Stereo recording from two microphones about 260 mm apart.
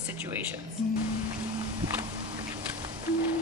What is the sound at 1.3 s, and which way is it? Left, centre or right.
Music, centre.